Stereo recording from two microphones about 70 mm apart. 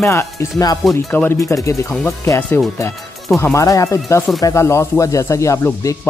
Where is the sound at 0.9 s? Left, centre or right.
Left.